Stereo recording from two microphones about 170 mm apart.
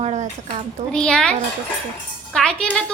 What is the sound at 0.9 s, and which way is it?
A woman's voice, 5° left (ahead or behind).